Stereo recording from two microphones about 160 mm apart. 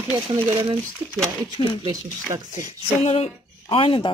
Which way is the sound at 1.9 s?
20° right (ahead or behind).